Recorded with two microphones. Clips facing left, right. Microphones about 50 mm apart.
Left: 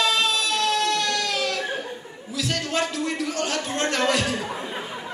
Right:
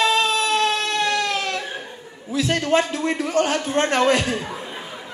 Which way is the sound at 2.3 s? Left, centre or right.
Right.